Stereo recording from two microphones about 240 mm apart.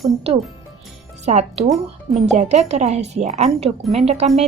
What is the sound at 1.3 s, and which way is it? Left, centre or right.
Speech, right.